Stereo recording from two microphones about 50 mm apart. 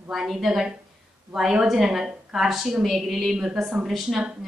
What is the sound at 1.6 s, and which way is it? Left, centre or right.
A woman's voice, centre.